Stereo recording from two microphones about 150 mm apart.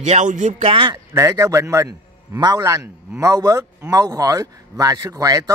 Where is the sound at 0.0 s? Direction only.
50° right (ahead or behind).